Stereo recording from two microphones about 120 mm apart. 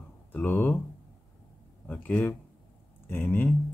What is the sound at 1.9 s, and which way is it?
Speech, 15° left (ahead or behind).